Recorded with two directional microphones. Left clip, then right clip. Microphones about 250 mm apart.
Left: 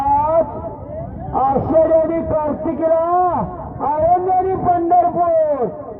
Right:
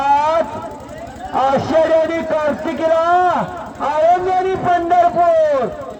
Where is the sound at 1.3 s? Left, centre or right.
Right.